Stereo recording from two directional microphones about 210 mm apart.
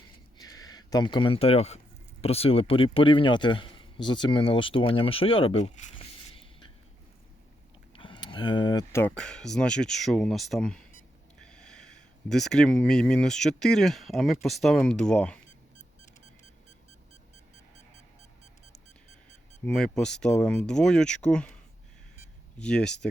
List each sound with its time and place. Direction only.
0.3 s a sound: 15° left (ahead or behind)
2.2 s speech: 30° left (ahead or behind)
7.9 s speech: 25° left (ahead or behind); by 15.4 s 5° left (ahead or behind)
19.6 s speech: 5° left (ahead or behind)